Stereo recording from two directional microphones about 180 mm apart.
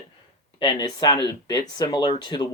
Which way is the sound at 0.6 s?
25° left (ahead or behind).